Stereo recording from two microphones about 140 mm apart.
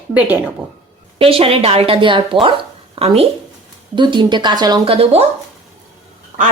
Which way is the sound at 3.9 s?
35° right (ahead or behind).